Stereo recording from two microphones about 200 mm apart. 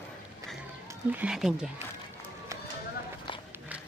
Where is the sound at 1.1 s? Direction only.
5° right (ahead or behind).